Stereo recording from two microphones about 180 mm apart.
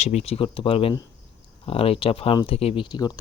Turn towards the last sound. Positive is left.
turn(degrees=25)  # may be behind; listen again after turning